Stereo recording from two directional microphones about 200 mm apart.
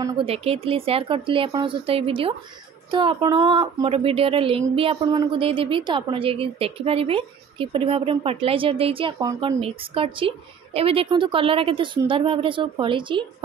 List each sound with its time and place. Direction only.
0.2 s a woman's voice: 30° right (ahead or behind)